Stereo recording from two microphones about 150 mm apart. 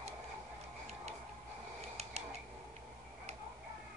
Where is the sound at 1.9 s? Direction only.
45° right (ahead or behind).